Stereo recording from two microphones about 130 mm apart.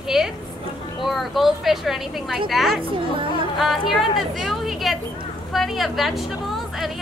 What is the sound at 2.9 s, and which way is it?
Speech, 40° right (ahead or behind).